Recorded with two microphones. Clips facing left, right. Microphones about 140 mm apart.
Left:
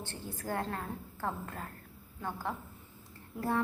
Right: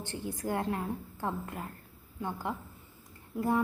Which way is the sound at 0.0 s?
15° right (ahead or behind).